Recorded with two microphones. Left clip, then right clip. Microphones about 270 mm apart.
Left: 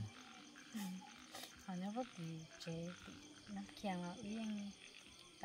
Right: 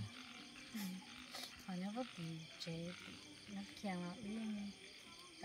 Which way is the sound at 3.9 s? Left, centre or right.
Centre.